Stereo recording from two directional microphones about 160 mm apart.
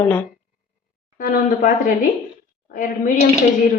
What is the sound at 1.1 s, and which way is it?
Speech, 55° left (ahead or behind).